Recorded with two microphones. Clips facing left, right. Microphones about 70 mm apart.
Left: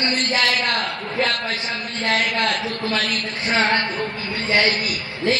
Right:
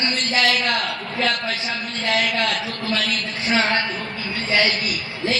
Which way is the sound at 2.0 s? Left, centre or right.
Left.